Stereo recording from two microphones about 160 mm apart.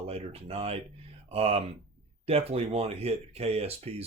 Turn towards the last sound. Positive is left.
turn(degrees=-40)  # may be behind; listen again after turning